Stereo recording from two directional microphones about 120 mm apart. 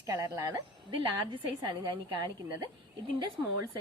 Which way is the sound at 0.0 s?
30° right (ahead or behind).